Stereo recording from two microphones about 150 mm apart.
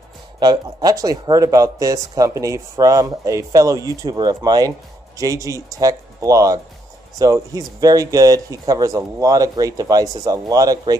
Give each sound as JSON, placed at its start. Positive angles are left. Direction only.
{"t": 0.4, "sound": "speech", "side_deg": -25}